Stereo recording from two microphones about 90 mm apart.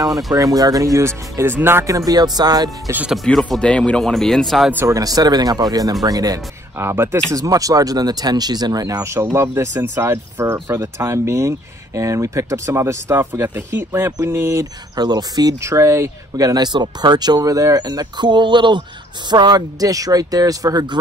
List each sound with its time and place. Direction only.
0.3 s speech: 45° right (ahead or behind)
1.4 s speech: 25° right (ahead or behind)
1.9 s speech: 40° right (ahead or behind)
3.3 s speech: 5° left (ahead or behind)
4.8 s speech: 45° right (ahead or behind)
6.8 s speech: 30° right (ahead or behind)
7.3 s speech: 40° right (ahead or behind)
9.0 s speech: 30° right (ahead or behind)
15.0 s speech: 50° right (ahead or behind)
15.6 s speech: 35° right (ahead or behind)